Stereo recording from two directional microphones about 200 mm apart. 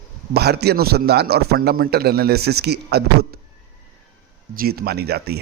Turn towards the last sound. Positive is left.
turn(degrees=-55)  # may be behind; listen again after turning